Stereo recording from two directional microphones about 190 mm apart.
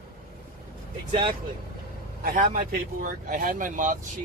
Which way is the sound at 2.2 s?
45° right (ahead or behind).